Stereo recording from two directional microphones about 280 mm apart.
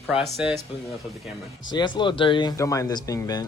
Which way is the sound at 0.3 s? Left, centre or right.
Centre.